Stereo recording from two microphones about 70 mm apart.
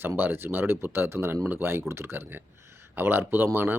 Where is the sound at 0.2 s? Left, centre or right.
Right.